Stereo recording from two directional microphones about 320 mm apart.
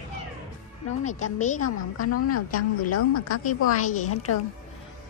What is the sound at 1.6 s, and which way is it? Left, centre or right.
A woman's voice, left.